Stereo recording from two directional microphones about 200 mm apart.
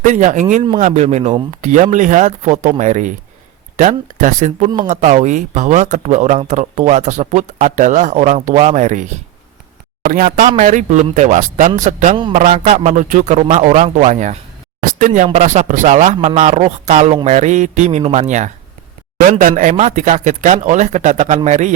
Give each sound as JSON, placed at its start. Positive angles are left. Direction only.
{"t": 0.0, "sound": "speech", "side_deg": -40}